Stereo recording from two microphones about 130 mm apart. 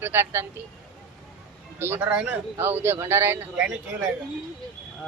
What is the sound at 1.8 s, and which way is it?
A man's voice, 15° right (ahead or behind).